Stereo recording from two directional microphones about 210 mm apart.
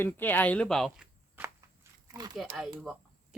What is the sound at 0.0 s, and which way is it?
Walk, 10° left (ahead or behind).